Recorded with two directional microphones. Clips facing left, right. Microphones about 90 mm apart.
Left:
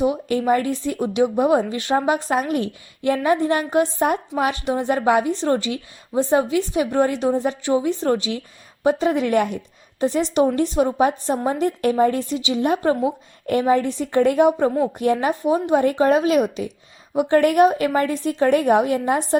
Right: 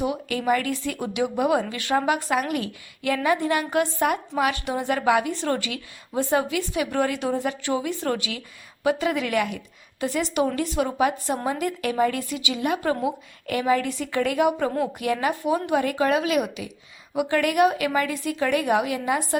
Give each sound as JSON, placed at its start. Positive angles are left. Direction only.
{"t": 0.0, "sound": "a woman's voice", "side_deg": 30}